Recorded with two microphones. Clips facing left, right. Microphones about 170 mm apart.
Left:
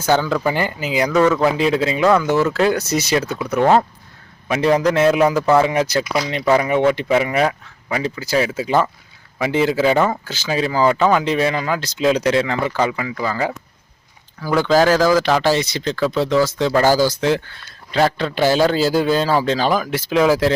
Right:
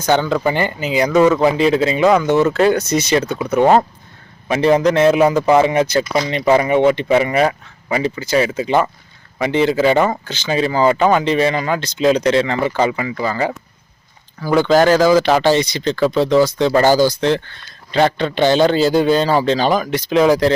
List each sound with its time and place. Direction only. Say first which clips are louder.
0.1 s speech: right 1 dB; 20° right (ahead or behind)
0.4 s speech: right 2 dB; 5° left (ahead or behind)
1.1 s speech: right 3 dB; 15° right (ahead or behind)
1.5 s speech: right 3 dB; centre (ahead or behind)
2.0 s speech: right 1 dB; 20° right (ahead or behind)
2.5 s speech: right 3 dB; centre (ahead or behind)
3.4 s speech: right 4 dB; 20° right (ahead or behind)
4.4 s speech: right 3 dB; centre (ahead or behind)